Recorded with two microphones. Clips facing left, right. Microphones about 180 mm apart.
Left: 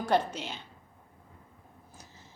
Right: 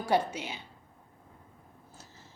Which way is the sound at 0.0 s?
10° right (ahead or behind).